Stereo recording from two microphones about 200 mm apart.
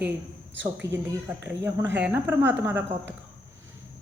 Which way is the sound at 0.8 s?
15° right (ahead or behind).